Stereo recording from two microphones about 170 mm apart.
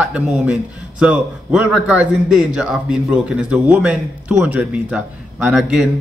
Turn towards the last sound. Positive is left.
turn(degrees=-5)  # may be behind; listen again after turning